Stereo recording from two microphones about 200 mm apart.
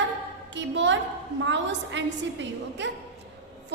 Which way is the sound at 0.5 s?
65° right (ahead or behind).